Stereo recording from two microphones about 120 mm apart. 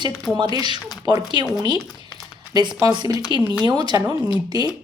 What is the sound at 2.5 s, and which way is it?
Speech, 40° right (ahead or behind).